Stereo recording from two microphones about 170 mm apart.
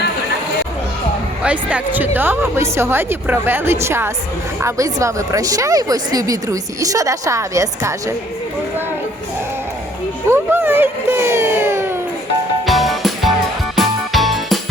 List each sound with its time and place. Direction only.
1.5 s a woman's voice: 10° right (ahead or behind)
10.2 s a sound: 15° right (ahead or behind)
12.6 s music: centre (ahead or behind)